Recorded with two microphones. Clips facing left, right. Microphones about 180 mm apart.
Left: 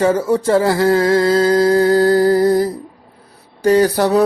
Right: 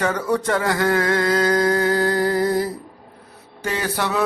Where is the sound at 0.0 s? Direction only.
25° left (ahead or behind).